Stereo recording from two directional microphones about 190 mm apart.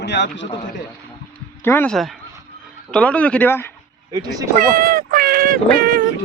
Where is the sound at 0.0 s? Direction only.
65° left (ahead or behind).